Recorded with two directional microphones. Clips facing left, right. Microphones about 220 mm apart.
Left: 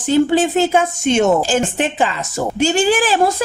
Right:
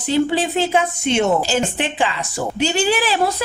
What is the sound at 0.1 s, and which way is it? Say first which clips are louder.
A woman's voice: left 4 dB; 45° left (ahead or behind).